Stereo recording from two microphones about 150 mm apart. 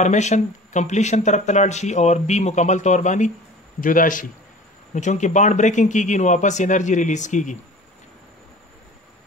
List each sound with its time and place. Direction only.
0.0 s speech: 50° left (ahead or behind)
3.8 s a man's voice: 65° left (ahead or behind)
4.9 s speech: 50° left (ahead or behind)